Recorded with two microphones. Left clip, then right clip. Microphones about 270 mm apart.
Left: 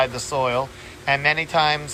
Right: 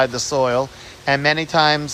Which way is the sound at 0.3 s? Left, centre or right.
Right.